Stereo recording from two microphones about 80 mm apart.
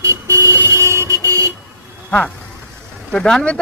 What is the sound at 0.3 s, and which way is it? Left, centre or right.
Vehicle, right.